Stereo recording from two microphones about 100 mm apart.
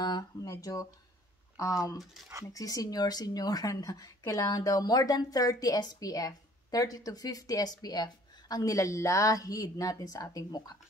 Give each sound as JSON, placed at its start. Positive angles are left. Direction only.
{"t": 0.0, "sound": "speech", "side_deg": 40}
{"t": 2.5, "sound": "speech", "side_deg": 35}